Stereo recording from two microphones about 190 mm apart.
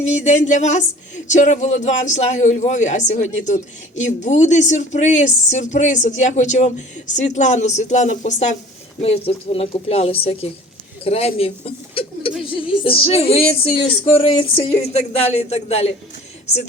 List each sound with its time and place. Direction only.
0.0 s a woman's voice: 40° left (ahead or behind)